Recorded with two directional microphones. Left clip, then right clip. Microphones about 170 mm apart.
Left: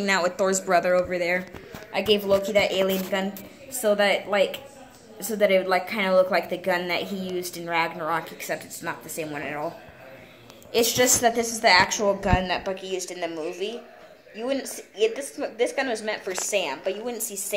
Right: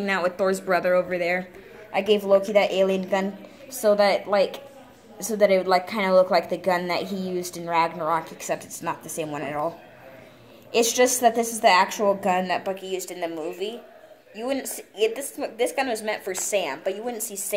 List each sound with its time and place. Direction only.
0.0 s speech: 5° left (ahead or behind)
1.9 s a woman's voice: 15° right (ahead or behind); by 9.7 s 35° right (ahead or behind)
10.7 s a woman's voice: 25° right (ahead or behind); by 17.6 s 10° right (ahead or behind)